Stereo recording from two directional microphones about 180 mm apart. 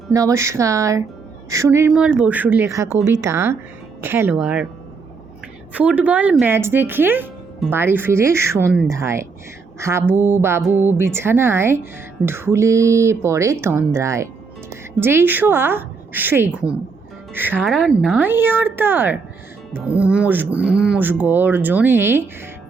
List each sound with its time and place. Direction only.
0.1 s speech: 20° right (ahead or behind)
1.9 s speech: 5° right (ahead or behind)
5.7 s speech: 5° right (ahead or behind)
17.7 s speech: centre (ahead or behind)
18.2 s speech: 10° right (ahead or behind)